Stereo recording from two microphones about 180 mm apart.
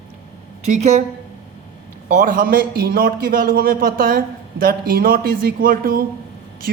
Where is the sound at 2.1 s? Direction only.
50° right (ahead or behind).